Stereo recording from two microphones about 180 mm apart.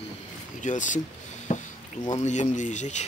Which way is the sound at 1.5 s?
45° left (ahead or behind).